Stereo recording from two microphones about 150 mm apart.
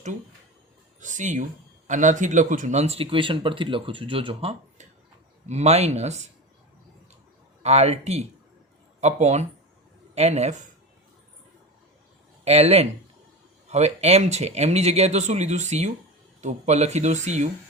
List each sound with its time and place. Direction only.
0.9 s speech: 55° right (ahead or behind)
7.6 s speech: 45° right (ahead or behind)
12.5 s speech: 45° right (ahead or behind)